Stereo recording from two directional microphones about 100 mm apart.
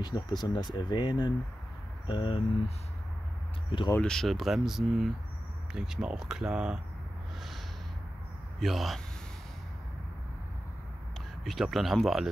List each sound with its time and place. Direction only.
0.0 s speech: 45° left (ahead or behind)
4.0 s speech: 5° left (ahead or behind)
8.5 s speech: centre (ahead or behind)
11.4 s speech: centre (ahead or behind)